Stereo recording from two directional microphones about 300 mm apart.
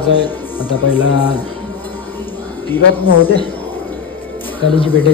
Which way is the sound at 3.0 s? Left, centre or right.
Centre.